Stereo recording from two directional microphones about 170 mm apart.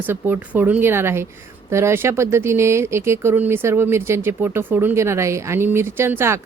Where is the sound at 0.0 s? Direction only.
10° right (ahead or behind).